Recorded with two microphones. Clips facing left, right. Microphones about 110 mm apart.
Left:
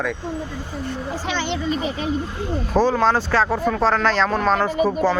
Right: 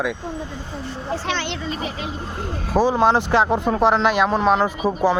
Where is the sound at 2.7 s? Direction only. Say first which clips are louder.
Right 1 dB; 15° right (ahead or behind).